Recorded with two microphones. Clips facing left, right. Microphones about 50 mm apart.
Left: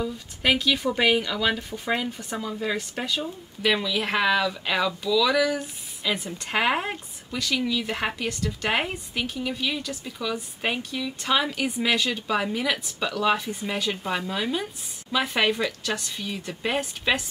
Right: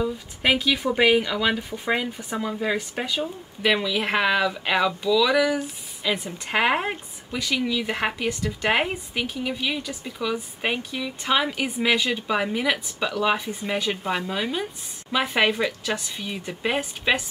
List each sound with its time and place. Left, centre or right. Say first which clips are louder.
0.0 s speech: right 2 dB; centre